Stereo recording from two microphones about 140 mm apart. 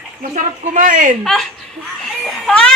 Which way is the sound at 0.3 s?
65° right (ahead or behind).